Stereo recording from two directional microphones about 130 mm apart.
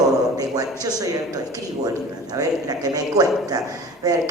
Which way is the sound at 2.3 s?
30° right (ahead or behind).